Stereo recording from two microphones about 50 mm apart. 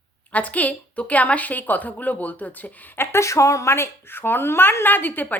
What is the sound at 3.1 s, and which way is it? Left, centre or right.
A woman's voice, left.